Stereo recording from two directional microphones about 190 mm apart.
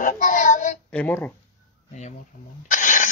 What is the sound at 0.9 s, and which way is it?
Speech, 5° left (ahead or behind).